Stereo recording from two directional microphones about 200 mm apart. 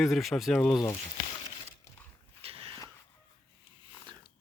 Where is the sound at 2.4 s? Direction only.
30° right (ahead or behind).